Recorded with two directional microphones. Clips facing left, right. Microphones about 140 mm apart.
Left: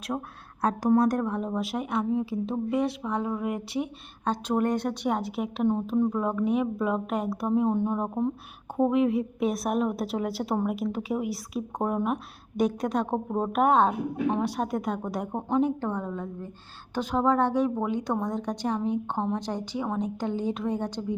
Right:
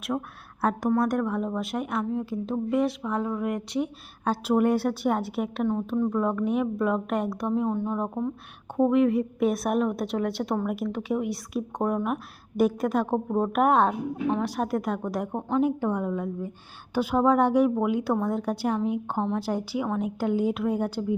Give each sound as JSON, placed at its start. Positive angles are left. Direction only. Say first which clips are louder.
{"t": 0.1, "sound": "a woman's voice", "louder": "right 3 dB", "side_deg": 10}
{"t": 0.6, "sound": "speech", "louder": "left 2 dB", "side_deg": -5}
{"t": 7.7, "sound": "speech", "louder": "left 2 dB", "side_deg": 20}
{"t": 7.9, "sound": "speech", "louder": "left 1 dB", "side_deg": 5}
{"t": 15.6, "sound": "a woman's voice", "louder": "right 3 dB", "side_deg": -10}